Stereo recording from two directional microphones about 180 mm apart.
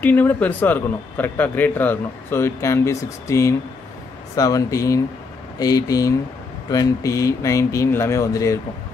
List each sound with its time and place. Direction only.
0.0 s a man's voice: 10° left (ahead or behind)